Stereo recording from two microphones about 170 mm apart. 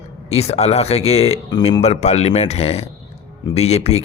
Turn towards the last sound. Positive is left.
turn(degrees=40)  # may be behind; listen again after turning